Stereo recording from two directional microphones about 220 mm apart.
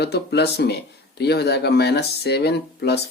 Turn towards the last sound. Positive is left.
turn(degrees=50)  # may be behind; listen again after turning